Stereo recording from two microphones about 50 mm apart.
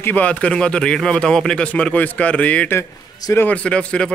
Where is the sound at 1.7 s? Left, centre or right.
Left.